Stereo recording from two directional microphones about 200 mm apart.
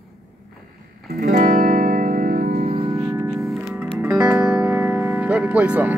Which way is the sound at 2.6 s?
25° right (ahead or behind).